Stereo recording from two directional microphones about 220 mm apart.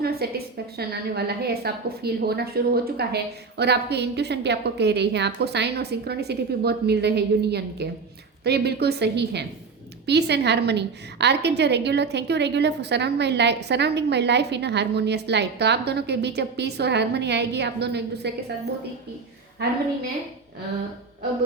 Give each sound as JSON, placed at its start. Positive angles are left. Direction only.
{"t": 0.0, "sound": "a woman's voice", "side_deg": -45}